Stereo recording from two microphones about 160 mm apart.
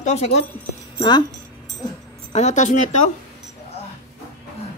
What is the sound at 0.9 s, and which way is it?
Speech, 30° left (ahead or behind).